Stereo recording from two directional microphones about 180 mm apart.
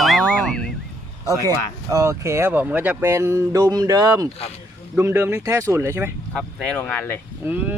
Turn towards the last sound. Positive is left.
turn(degrees=-10)  # may be behind; listen again after turning